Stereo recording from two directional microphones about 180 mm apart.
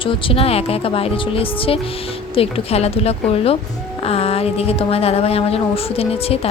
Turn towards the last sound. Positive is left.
turn(degrees=35)  # may be behind; listen again after turning